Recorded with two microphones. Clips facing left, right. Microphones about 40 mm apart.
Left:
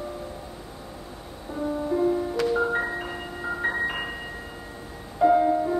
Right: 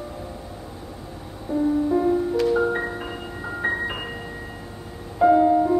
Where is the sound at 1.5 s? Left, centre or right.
Centre.